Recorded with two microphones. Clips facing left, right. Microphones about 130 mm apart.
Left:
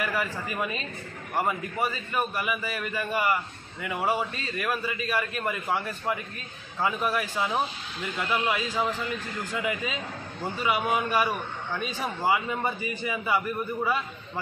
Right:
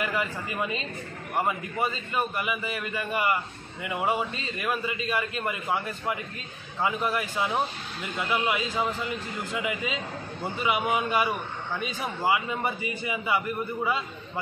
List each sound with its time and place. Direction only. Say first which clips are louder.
0.0 s a man's voice: even; 15° right (ahead or behind)